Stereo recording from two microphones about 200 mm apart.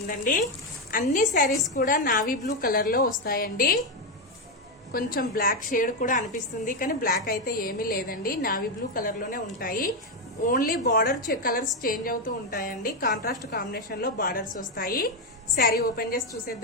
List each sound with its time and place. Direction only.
0.1 s a woman's voice: 40° left (ahead or behind)
4.9 s a woman's voice: 45° left (ahead or behind)